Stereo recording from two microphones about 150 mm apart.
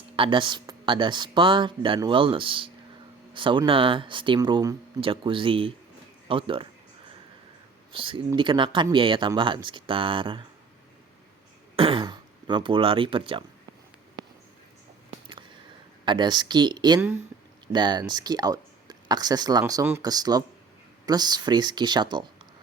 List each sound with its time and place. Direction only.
0.2 s speech: 35° right (ahead or behind)
7.9 s speech: 35° right (ahead or behind)
11.8 s speech: 35° right (ahead or behind)
16.0 s speech: 30° right (ahead or behind)